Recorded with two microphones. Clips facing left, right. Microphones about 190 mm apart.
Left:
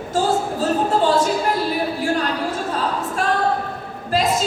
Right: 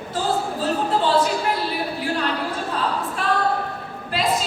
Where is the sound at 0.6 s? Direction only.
45° left (ahead or behind).